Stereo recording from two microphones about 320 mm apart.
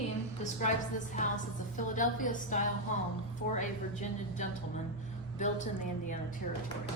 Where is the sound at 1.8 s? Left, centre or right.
Left.